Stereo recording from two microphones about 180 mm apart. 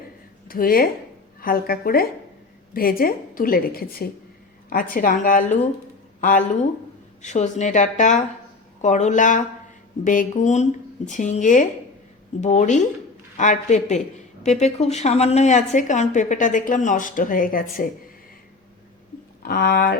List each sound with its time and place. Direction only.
0.4 s a woman's voice: 55° left (ahead or behind)
19.4 s speech: 60° left (ahead or behind)